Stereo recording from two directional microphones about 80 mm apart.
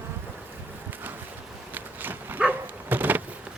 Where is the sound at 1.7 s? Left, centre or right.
Right.